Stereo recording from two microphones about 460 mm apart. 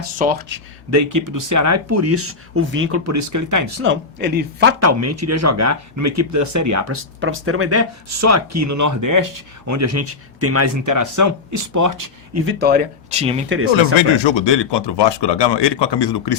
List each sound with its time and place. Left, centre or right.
0.2 s speech: right
0.9 s speech: right
3.8 s speech: right
12.5 s speech: right
14.3 s speech: left